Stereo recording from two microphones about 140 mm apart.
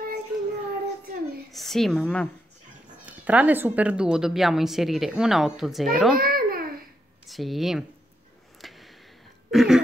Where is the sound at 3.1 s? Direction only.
10° right (ahead or behind).